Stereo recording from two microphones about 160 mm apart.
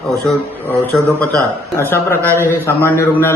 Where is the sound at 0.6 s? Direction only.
10° left (ahead or behind).